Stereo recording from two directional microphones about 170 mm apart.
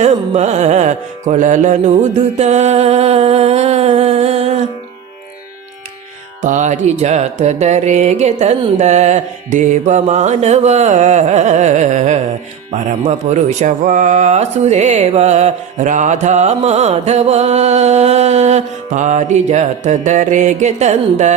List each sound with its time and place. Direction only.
0.0 s music: 40° right (ahead or behind)
6.4 s speech: 45° right (ahead or behind)